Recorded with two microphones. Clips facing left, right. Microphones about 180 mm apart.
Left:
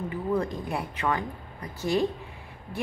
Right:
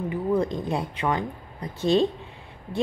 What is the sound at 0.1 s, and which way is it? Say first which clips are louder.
A woman's voice: right 4 dB; 15° right (ahead or behind).